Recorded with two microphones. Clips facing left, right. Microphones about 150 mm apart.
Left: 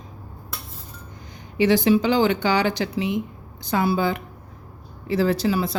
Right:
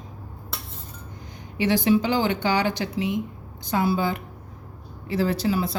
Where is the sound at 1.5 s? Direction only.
90° left.